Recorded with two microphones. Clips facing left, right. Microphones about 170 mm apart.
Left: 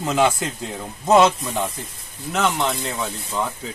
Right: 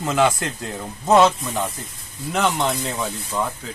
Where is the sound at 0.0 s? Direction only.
Centre (ahead or behind).